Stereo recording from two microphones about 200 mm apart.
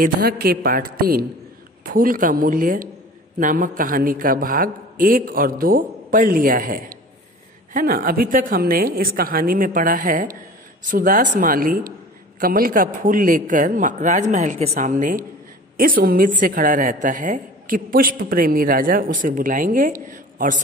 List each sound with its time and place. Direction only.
0.0 s a woman's voice: 50° right (ahead or behind)